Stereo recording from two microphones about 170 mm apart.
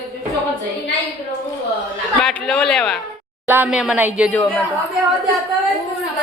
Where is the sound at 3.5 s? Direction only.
10° right (ahead or behind).